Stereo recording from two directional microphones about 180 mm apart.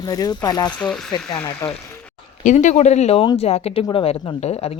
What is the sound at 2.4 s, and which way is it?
Speech, 45° left (ahead or behind).